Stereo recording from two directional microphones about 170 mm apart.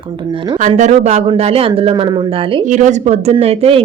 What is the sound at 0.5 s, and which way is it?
Speech, 45° right (ahead or behind).